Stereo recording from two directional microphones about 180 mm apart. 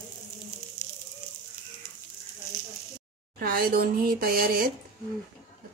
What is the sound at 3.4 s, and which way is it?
Speech, 55° right (ahead or behind).